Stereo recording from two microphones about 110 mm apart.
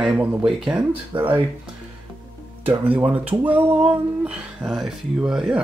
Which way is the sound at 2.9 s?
15° right (ahead or behind).